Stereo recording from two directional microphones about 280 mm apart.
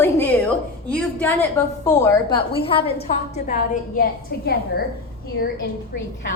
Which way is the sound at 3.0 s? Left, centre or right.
Left.